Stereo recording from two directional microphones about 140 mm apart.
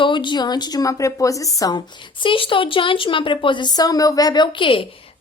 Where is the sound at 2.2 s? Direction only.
40° left (ahead or behind).